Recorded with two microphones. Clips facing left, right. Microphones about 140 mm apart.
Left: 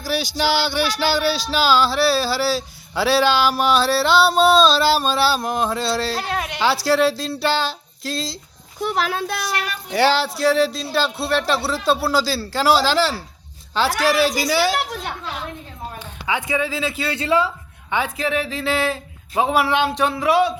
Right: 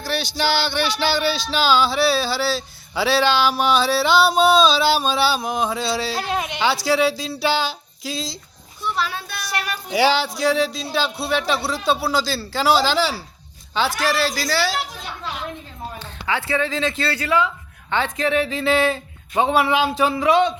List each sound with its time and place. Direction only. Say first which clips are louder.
0.0 s speech: left 1 dB; 10° left (ahead or behind)
6.2 s speech: right 1 dB; 10° right (ahead or behind)
6.8 s speech: left 2 dB; centre (ahead or behind)
8.8 s speech: left 4 dB; 90° left
9.9 s speech: left 1 dB; centre (ahead or behind)
14.0 s speech: left 3 dB; 15° left (ahead or behind)
14.6 s a woman's voice: left 3 dB; 60° left (ahead or behind)
16.0 s speech: even; 15° left (ahead or behind)
17.2 s a woman's voice: left 3 dB; 30° left (ahead or behind)
17.9 s speech: right 1 dB; 5° left (ahead or behind)